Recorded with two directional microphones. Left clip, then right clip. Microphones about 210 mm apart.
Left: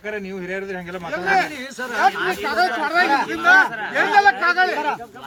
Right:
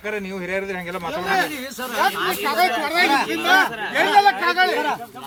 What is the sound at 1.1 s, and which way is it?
Speech, 10° right (ahead or behind).